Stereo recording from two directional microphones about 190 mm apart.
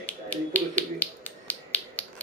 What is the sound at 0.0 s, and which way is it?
Finger snapping, 5° left (ahead or behind).